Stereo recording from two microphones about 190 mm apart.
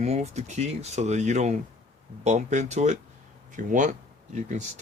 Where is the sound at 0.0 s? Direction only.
35° right (ahead or behind).